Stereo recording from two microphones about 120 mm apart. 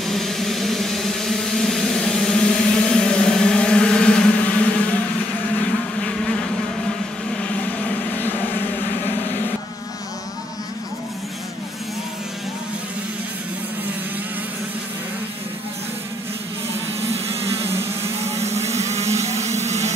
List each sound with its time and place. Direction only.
0.0 s vehicle: centre (ahead or behind)
5.9 s insect: 5° left (ahead or behind)
8.1 s vehicle: 15° left (ahead or behind)
18.3 s vehicle: 65° right (ahead or behind)